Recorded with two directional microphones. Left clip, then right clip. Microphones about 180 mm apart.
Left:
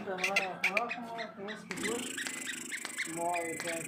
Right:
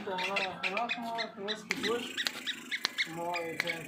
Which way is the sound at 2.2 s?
Centre (ahead or behind).